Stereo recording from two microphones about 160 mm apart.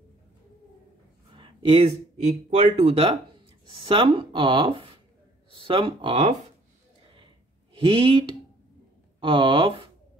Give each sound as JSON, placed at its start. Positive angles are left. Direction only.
{"t": 1.3, "sound": "speech", "side_deg": -35}
{"t": 7.7, "sound": "speech", "side_deg": -30}